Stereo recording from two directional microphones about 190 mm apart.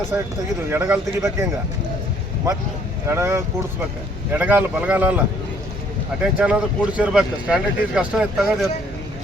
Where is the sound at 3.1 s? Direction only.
15° right (ahead or behind).